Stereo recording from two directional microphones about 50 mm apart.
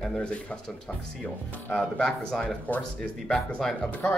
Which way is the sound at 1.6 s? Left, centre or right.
Left.